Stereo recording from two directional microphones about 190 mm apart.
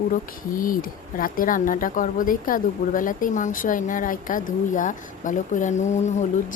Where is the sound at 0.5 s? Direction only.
45° left (ahead or behind).